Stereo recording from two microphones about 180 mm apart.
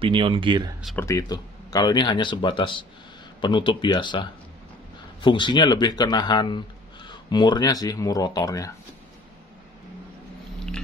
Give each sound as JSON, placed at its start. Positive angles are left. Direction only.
{"t": 0.0, "sound": "speech", "side_deg": -30}
{"t": 0.9, "sound": "speech", "side_deg": 15}